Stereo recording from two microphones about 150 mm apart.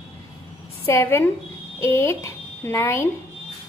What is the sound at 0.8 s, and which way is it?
A woman's voice, 15° left (ahead or behind).